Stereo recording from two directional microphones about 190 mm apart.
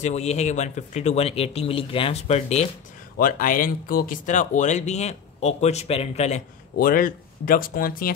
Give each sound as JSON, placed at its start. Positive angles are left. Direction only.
{"t": 0.0, "sound": "speech", "side_deg": 35}
{"t": 3.2, "sound": "speech", "side_deg": 45}
{"t": 6.8, "sound": "speech", "side_deg": 45}